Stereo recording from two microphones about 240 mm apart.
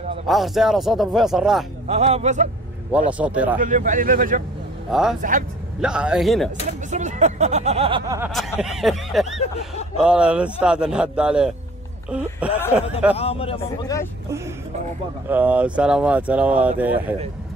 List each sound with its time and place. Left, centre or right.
0.3 s a man's voice: centre
1.9 s speech: right
2.9 s a man's voice: centre
3.5 s speech: right
4.9 s a man's voice: centre
6.9 s speech: right
8.2 s a man's voice: centre
9.3 s a man's voice: left
9.9 s a man's voice: centre
13.2 s a man's voice: left
15.2 s a man's voice: centre